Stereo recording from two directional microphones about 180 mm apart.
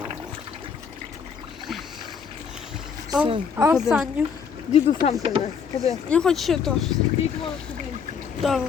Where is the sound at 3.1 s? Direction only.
25° right (ahead or behind).